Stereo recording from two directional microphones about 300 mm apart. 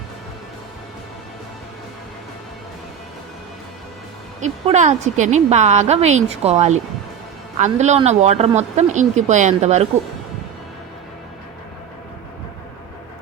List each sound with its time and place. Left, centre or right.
4.6 s speech: right